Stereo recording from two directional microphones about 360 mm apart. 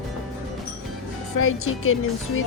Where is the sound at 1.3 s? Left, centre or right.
Left.